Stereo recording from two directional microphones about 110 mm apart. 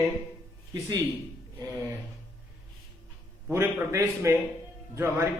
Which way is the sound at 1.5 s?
30° right (ahead or behind).